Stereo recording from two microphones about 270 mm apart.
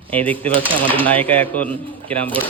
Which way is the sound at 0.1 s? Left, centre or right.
Centre.